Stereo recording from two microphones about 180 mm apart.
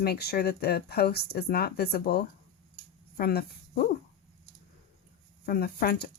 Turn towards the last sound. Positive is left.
turn(degrees=60)  # may be behind; listen again after turning